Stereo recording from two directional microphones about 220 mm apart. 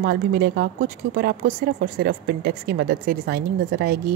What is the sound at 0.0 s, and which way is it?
Speech, 45° right (ahead or behind).